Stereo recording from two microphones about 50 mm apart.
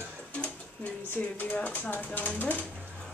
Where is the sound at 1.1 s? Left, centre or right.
Left.